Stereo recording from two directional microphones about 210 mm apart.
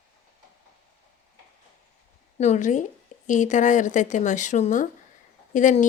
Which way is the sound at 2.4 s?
35° left (ahead or behind).